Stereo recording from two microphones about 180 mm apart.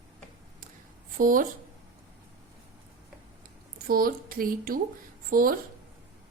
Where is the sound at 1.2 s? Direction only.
50° right (ahead or behind).